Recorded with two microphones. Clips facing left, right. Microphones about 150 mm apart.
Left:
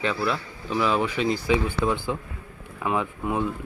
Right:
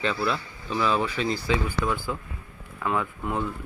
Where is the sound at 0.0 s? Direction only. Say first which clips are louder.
Left 1 dB; 10° left (ahead or behind).